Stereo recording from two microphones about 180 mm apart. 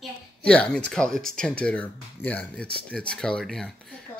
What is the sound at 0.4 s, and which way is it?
Speech, 5° left (ahead or behind).